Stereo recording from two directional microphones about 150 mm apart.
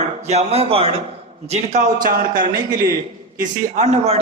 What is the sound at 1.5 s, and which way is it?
A man's voice, 50° right (ahead or behind).